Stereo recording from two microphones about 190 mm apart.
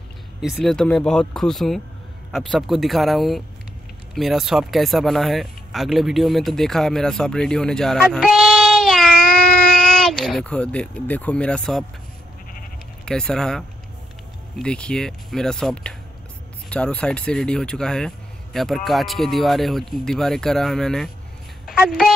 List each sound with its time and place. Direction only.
0.4 s speech: centre (ahead or behind)
9.4 s child singing: 50° left (ahead or behind)
9.7 s speech: 5° left (ahead or behind)
13.0 s speech: 5° left (ahead or behind)
21.6 s a sound: centre (ahead or behind)